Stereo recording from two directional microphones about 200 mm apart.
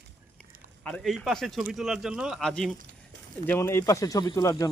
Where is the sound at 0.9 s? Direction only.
5° left (ahead or behind).